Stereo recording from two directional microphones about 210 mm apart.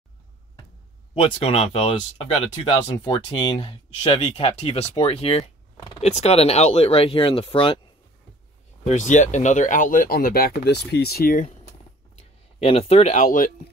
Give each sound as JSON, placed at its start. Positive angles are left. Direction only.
{"t": 1.1, "sound": "speech", "side_deg": 30}
{"t": 8.8, "sound": "speech", "side_deg": 35}
{"t": 12.2, "sound": "speech", "side_deg": 30}